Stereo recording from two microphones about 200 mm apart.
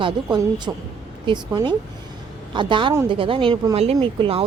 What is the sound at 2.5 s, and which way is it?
A woman's voice, 25° right (ahead or behind).